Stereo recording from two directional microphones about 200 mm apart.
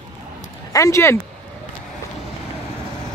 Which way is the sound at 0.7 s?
15° left (ahead or behind).